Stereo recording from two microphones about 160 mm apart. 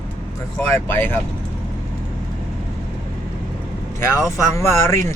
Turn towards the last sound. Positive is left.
turn(degrees=15)  # may be behind; listen again after turning